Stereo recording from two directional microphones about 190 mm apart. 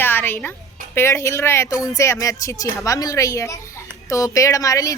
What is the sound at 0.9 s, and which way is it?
Speech, 15° left (ahead or behind).